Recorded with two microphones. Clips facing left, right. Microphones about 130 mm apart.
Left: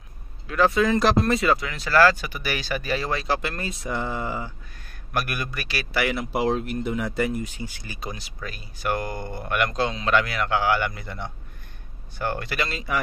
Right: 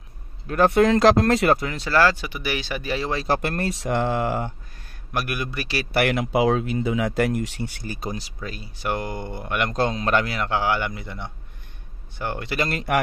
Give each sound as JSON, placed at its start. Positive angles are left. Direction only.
{"t": 0.5, "sound": "speech", "side_deg": -55}
{"t": 1.7, "sound": "speech", "side_deg": -30}
{"t": 3.3, "sound": "speech", "side_deg": -50}
{"t": 5.1, "sound": "speech", "side_deg": -20}
{"t": 5.9, "sound": "speech", "side_deg": -65}
{"t": 6.8, "sound": "speech", "side_deg": -90}
{"t": 7.1, "sound": "speech", "side_deg": -70}
{"t": 7.8, "sound": "speech", "side_deg": -45}
{"t": 8.4, "sound": "speech", "side_deg": -25}
{"t": 9.8, "sound": "a man's voice", "side_deg": -45}
{"t": 10.2, "sound": "speech", "side_deg": -30}
{"t": 12.6, "sound": "speech", "side_deg": -65}